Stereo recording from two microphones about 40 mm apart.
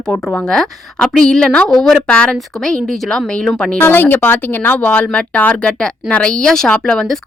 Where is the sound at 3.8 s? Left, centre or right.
Left.